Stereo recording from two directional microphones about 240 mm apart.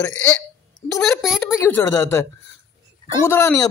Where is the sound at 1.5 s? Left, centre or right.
Centre.